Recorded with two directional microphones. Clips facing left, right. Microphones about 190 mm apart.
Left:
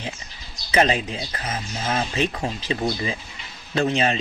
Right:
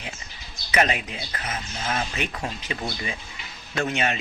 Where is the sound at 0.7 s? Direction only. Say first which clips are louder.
Left 4 dB; 30° left (ahead or behind).